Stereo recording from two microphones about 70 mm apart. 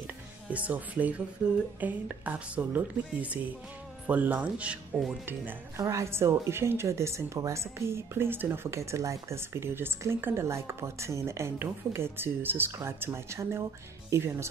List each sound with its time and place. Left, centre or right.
0.0 s music: right
1.8 s speech: right
5.2 s speech: right
5.8 s speech: right